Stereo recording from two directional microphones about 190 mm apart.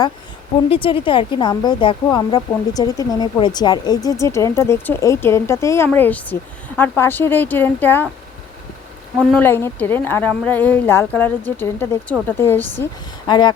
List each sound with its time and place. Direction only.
0.7 s speech: 30° left (ahead or behind); by 8.0 s 10° left (ahead or behind)
9.1 s speech: centre (ahead or behind)
13.2 s speech: 20° left (ahead or behind)